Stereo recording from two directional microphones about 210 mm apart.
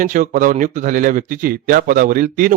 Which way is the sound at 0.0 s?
40° right (ahead or behind).